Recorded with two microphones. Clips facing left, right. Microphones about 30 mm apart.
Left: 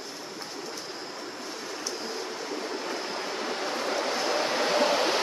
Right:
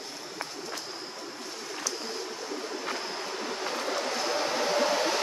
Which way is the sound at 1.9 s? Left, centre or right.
Right.